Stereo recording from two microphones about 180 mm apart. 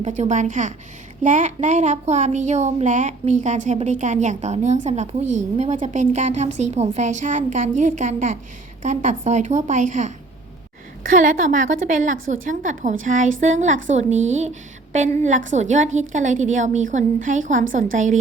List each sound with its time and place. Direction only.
0.0 s a woman's voice: 40° right (ahead or behind)